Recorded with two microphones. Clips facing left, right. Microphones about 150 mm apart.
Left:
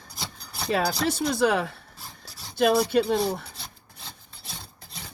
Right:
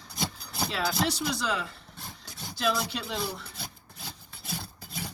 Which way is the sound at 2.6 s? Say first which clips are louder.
Left 9 dB; 55° left (ahead or behind).